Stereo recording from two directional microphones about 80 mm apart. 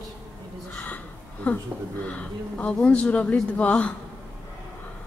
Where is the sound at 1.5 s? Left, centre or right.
Centre.